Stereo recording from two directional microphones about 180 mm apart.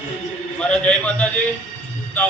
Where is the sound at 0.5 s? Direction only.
5° left (ahead or behind).